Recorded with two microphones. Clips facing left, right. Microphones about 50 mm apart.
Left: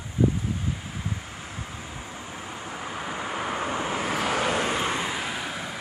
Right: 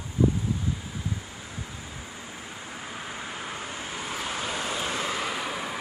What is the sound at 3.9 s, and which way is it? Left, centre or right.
Vehicle, left.